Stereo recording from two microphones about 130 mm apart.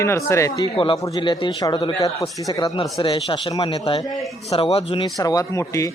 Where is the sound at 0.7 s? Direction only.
40° left (ahead or behind).